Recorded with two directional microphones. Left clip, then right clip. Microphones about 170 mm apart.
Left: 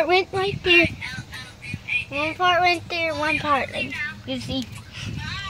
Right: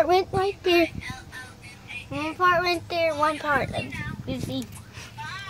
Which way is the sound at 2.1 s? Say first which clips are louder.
Even; centre (ahead or behind).